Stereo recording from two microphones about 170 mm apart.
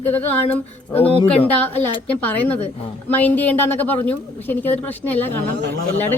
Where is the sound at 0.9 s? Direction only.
35° left (ahead or behind).